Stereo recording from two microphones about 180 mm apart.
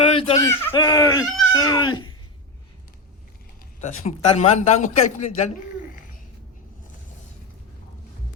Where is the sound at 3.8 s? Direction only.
40° left (ahead or behind).